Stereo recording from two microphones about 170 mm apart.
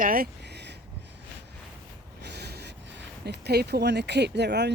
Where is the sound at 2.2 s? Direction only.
80° right.